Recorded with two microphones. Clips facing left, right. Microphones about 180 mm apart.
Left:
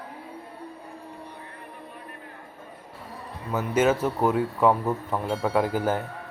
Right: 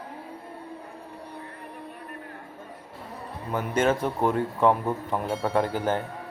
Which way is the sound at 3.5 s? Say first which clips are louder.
Left 2 dB; 5° left (ahead or behind).